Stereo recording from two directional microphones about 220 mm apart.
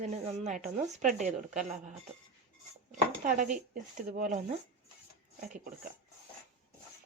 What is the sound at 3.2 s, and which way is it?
Speech, 35° right (ahead or behind).